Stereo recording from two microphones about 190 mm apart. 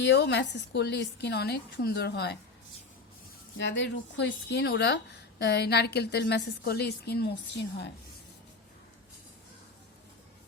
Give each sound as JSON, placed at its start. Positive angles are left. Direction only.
{"t": 0.0, "sound": "a woman's voice", "side_deg": 65}
{"t": 3.6, "sound": "a woman's voice", "side_deg": 65}